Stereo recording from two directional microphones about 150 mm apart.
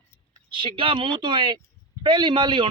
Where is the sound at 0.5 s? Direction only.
35° right (ahead or behind).